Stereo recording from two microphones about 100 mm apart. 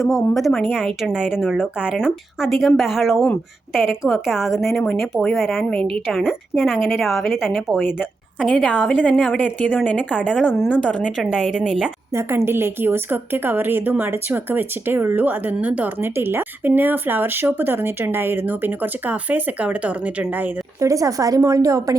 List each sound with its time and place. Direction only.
0.0 s a woman's voice: centre (ahead or behind)
8.9 s speech: 10° left (ahead or behind)
11.3 s speech: 5° right (ahead or behind)
12.1 s a woman's voice: 25° right (ahead or behind)
20.7 s speech: 35° right (ahead or behind)